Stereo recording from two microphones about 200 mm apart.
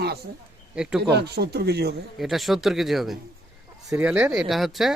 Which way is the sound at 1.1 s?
55° right (ahead or behind).